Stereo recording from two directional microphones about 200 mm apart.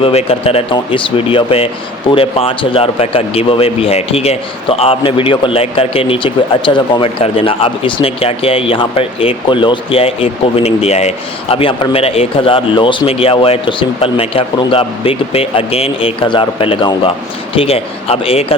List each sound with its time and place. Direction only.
0.0 s speech: 30° left (ahead or behind)